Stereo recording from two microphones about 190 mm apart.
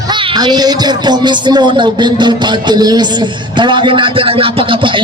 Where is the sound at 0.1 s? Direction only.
20° right (ahead or behind).